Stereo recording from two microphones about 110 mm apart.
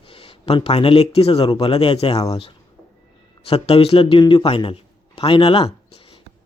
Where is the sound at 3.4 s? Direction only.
60° left (ahead or behind).